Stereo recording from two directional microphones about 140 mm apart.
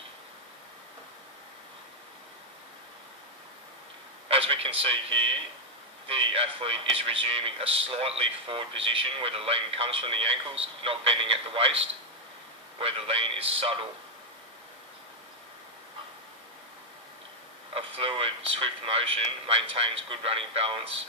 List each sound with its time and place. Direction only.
4.3 s speech: 40° right (ahead or behind)
17.7 s speech: 40° right (ahead or behind)